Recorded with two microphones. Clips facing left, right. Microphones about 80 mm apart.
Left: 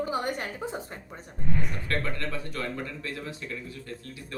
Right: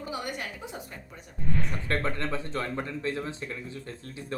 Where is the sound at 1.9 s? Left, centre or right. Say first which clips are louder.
Right 3 dB; right.